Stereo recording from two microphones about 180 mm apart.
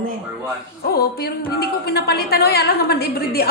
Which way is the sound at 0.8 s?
60° left (ahead or behind).